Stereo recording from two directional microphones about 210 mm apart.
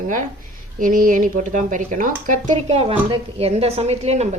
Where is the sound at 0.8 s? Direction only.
40° right (ahead or behind).